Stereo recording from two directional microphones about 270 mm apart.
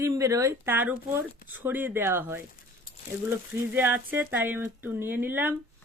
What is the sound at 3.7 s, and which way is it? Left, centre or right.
Speech, centre.